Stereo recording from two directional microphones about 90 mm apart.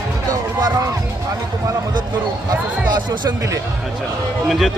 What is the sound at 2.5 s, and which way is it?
Speech, 45° right (ahead or behind).